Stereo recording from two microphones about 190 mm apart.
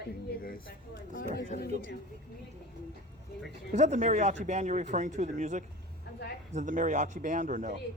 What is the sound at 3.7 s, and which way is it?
Speech, 40° right (ahead or behind).